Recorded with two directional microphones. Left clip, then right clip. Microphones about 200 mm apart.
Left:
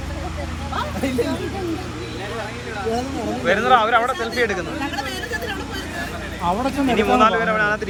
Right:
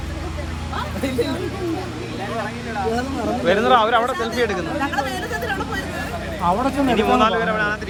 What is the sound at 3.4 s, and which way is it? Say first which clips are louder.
Speech: even; 20° right (ahead or behind).